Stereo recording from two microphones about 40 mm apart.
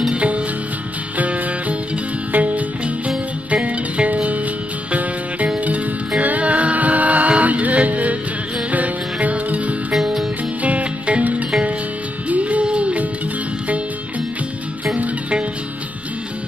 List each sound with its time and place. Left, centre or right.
0.1 s music: right
5.6 s music: right
9.9 s music: centre
10.6 s music: right